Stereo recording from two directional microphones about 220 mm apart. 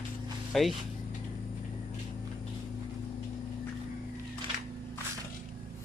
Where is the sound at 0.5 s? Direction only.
Centre (ahead or behind).